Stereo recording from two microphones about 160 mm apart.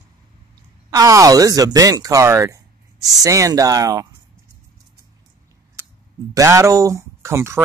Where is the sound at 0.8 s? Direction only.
20° right (ahead or behind).